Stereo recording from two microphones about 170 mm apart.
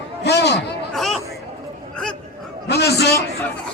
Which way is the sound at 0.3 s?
80° left.